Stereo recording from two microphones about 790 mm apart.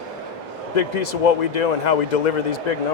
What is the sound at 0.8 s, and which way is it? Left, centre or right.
Speech, left.